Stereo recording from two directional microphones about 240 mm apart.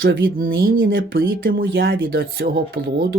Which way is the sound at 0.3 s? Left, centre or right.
Right.